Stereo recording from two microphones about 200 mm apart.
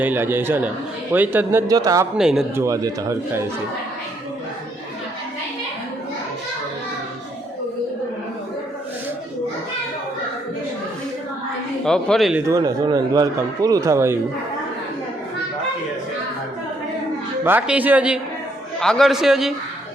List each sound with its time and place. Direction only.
0.0 s speech: 10° right (ahead or behind)
2.1 s a man's voice: centre (ahead or behind)
2.6 s speech: 15° right (ahead or behind)
11.9 s a man's voice: centre (ahead or behind)
12.5 s speech: 20° right (ahead or behind)
17.4 s a man's voice: 10° right (ahead or behind)